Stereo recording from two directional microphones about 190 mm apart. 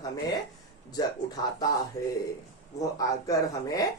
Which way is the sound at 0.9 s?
20° left (ahead or behind).